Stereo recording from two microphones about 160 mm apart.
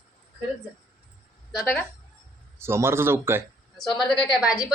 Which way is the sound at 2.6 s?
15° right (ahead or behind).